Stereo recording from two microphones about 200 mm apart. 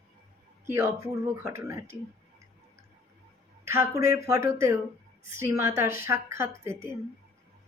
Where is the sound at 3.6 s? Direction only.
10° right (ahead or behind).